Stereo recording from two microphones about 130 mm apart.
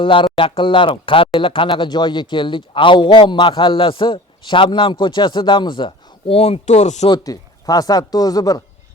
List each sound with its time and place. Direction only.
0.0 s speech: 40° left (ahead or behind); by 7.1 s 60° left (ahead or behind)
7.1 s speech: 30° left (ahead or behind)